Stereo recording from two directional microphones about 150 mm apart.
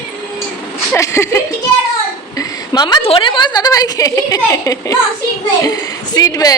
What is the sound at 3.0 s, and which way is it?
A woman's voice, 35° left (ahead or behind).